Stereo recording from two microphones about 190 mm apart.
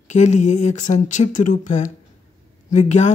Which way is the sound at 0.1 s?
40° left (ahead or behind).